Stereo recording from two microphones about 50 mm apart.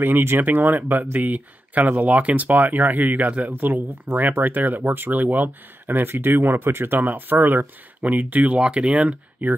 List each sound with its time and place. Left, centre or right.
0.0 s speech: right